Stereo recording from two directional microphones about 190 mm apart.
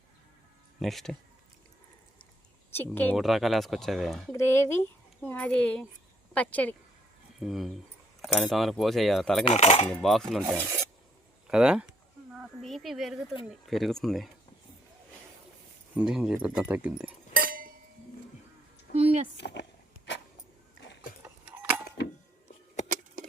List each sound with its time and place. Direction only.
0.8 s speech: centre (ahead or behind)
2.7 s speech: 10° left (ahead or behind)
3.2 s speech: centre (ahead or behind)
4.3 s speech: 15° left (ahead or behind)
9.4 s cutlery: 35° left (ahead or behind)
9.9 s speech: centre (ahead or behind)
10.5 s filing: 15° right (ahead or behind)
11.4 s speech: 5° right (ahead or behind)
16.0 s speech: 5° right (ahead or behind)
17.3 s chink: 50° right (ahead or behind)
18.9 s a sound: 30° right (ahead or behind)
19.4 s speech: 65° left (ahead or behind)